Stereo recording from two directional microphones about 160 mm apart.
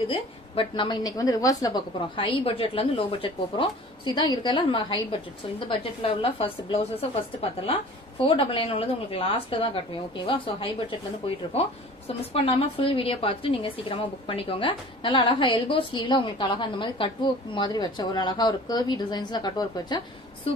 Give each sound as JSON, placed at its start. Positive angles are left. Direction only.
{"t": 0.6, "sound": "a woman's voice", "side_deg": 30}
{"t": 2.1, "sound": "a woman's voice", "side_deg": 35}